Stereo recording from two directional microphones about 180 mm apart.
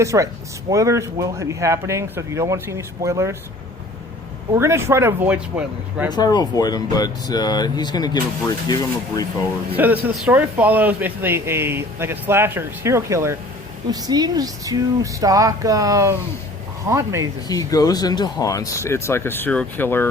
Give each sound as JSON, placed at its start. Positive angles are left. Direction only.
{"t": 0.0, "sound": "speech", "side_deg": -15}
{"t": 4.5, "sound": "speech", "side_deg": -15}
{"t": 6.1, "sound": "speech", "side_deg": 25}
{"t": 9.7, "sound": "speech", "side_deg": -10}
{"t": 17.5, "sound": "speech", "side_deg": 20}